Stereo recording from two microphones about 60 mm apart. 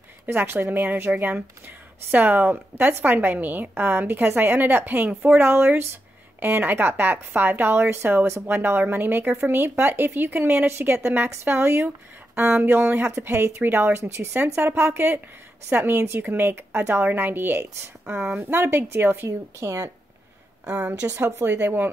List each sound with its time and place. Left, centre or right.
0.3 s speech: right
13.2 s speech: right
18.0 s speech: right
19.2 s a woman's voice: right
20.7 s a woman's voice: right
21.2 s speech: right